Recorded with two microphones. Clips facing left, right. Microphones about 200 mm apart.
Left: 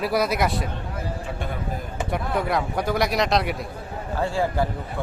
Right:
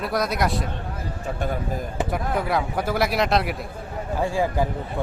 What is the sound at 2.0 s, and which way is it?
Speech, centre (ahead or behind).